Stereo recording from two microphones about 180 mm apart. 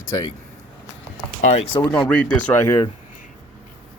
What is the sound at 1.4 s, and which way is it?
Speech, 40° left (ahead or behind).